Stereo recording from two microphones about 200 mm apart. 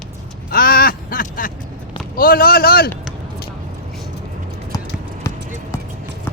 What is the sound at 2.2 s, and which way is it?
Speech, 45° left (ahead or behind).